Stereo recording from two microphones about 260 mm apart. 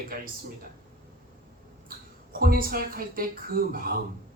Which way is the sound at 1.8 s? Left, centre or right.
Right.